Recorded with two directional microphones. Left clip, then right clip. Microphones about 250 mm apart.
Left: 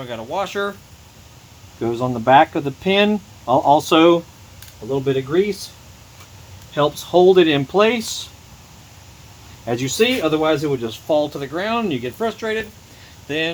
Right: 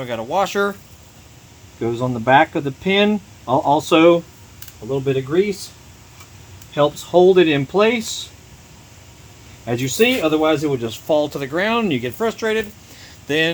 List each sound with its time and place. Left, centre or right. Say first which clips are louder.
0.0 s speech: right 4 dB; right
1.8 s speech: left 1 dB; centre
6.7 s speech: right 1 dB; centre
9.6 s speech: right 1 dB; centre; by 13.5 s right